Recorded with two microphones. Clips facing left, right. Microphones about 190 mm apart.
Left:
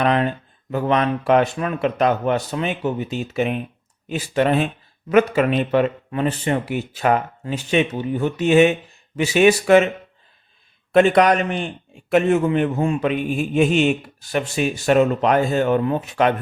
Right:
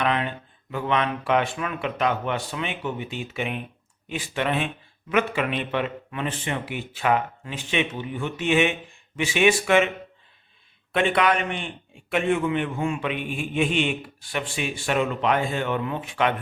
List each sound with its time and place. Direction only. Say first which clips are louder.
0.0 s speech: left 6 dB; 40° left (ahead or behind)
10.9 s speech: left 7 dB; 40° left (ahead or behind)